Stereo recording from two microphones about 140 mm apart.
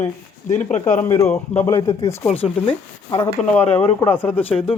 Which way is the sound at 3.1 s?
20° left (ahead or behind).